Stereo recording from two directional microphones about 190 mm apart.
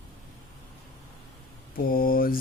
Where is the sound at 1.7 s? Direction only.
50° left (ahead or behind).